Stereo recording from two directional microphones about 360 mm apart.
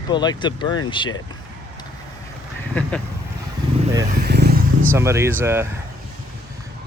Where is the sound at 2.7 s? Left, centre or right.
Centre.